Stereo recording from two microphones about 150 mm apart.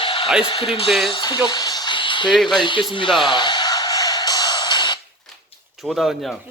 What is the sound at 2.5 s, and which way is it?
Speech, 30° left (ahead or behind).